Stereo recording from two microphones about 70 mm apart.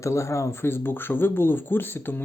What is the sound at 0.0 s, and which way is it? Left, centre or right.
Speech, left.